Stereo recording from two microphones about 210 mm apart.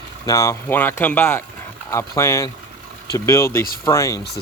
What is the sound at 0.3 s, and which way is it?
Speech, 15° left (ahead or behind).